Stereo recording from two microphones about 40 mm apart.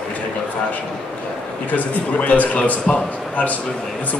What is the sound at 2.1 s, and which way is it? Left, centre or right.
Speech, left.